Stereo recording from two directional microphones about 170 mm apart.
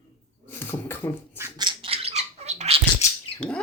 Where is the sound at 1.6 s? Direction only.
30° right (ahead or behind).